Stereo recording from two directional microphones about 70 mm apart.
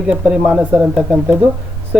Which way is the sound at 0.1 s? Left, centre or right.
Centre.